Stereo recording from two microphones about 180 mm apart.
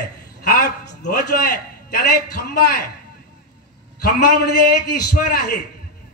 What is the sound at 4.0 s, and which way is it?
Speech, 60° left (ahead or behind).